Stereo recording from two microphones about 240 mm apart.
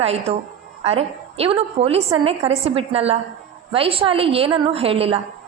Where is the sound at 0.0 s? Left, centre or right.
Right.